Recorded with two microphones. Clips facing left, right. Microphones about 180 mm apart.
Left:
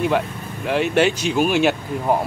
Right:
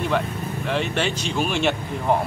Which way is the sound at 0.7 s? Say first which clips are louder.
Left 7 dB; 10° left (ahead or behind).